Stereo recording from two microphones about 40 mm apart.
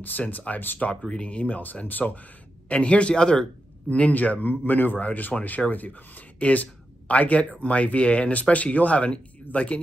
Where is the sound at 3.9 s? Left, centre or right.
Left.